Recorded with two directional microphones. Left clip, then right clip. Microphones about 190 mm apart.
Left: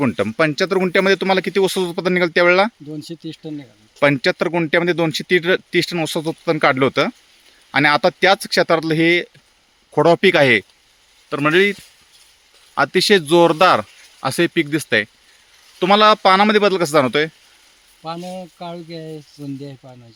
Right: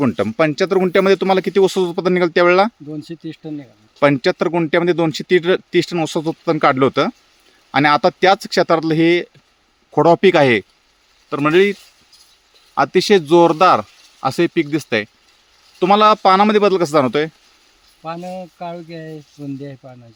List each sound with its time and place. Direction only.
0.0 s speech: 5° right (ahead or behind)